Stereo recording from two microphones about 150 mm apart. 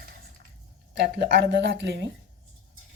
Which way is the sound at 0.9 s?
90° right.